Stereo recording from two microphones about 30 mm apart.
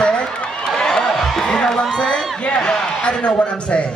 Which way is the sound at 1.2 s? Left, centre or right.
Centre.